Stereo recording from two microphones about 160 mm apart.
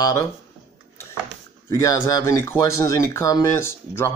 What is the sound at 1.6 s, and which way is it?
Speech, 15° left (ahead or behind).